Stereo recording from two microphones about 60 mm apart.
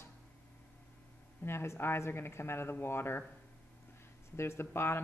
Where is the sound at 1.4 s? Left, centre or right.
Left.